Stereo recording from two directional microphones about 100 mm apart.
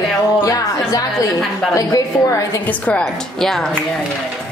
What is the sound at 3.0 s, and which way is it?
Speech, 5° left (ahead or behind).